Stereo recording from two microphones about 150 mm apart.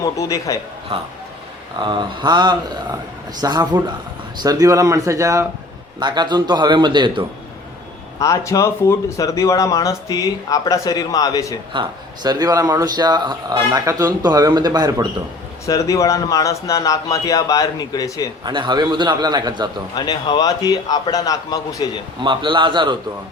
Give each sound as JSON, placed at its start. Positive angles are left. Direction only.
{"t": 0.0, "sound": "speech", "side_deg": 20}
{"t": 1.8, "sound": "speech", "side_deg": -30}
{"t": 8.2, "sound": "speech", "side_deg": 20}
{"t": 11.7, "sound": "speech", "side_deg": -30}
{"t": 15.6, "sound": "speech", "side_deg": 20}
{"t": 18.4, "sound": "speech", "side_deg": -30}
{"t": 20.0, "sound": "speech", "side_deg": 30}
{"t": 22.2, "sound": "a man's voice", "side_deg": -30}